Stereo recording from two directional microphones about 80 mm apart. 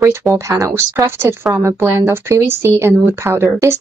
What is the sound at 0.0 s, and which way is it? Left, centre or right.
Speech, right.